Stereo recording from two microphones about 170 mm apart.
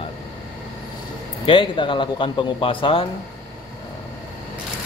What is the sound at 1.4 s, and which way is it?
Speech, 30° left (ahead or behind).